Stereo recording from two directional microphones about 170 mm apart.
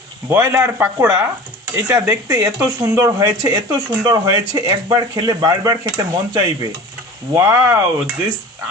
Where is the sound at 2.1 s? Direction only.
20° right (ahead or behind).